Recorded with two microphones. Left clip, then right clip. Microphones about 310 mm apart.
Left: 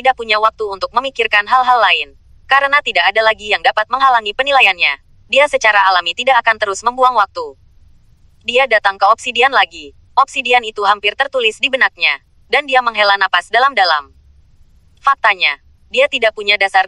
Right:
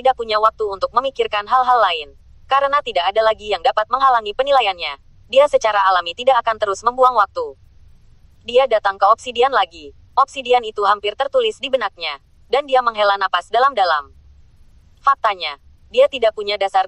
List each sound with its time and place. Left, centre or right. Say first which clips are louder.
0.0 s speech: left 3 dB; left